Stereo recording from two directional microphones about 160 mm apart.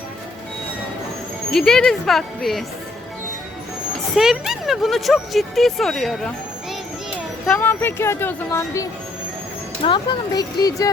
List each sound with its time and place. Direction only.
1.5 s a woman's voice: 5° left (ahead or behind)
4.1 s a woman's voice: 5° right (ahead or behind)
7.4 s speech: 10° left (ahead or behind)